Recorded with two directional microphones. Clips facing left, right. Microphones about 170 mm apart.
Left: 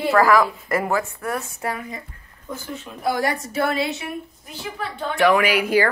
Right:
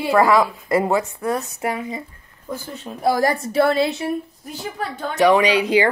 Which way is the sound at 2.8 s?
35° right (ahead or behind).